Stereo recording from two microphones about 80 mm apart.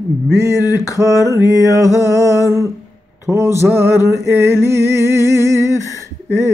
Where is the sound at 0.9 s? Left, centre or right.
Right.